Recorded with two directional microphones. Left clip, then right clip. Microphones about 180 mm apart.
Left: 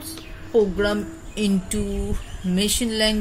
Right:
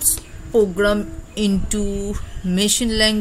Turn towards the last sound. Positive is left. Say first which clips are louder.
# right 4 dB
turn(degrees=-55)  # may be behind; listen again after turning